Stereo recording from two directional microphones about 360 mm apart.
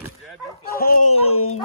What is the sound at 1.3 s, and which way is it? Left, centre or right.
Speech, left.